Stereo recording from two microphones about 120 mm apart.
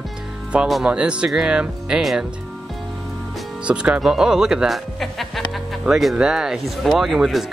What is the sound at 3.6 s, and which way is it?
Speech, 10° right (ahead or behind).